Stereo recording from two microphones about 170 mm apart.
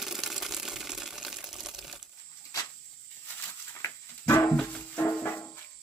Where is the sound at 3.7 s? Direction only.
15° left (ahead or behind).